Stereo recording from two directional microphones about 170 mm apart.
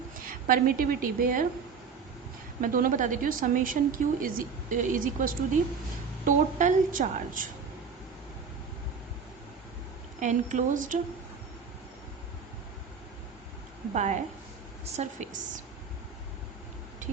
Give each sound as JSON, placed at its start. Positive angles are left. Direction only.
{"t": 0.4, "sound": "a woman's voice", "side_deg": -55}
{"t": 2.6, "sound": "a woman's voice", "side_deg": -50}
{"t": 10.2, "sound": "a woman's voice", "side_deg": -45}
{"t": 13.9, "sound": "a woman's voice", "side_deg": -45}